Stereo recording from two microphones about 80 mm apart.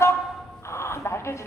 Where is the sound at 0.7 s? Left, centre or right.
Left.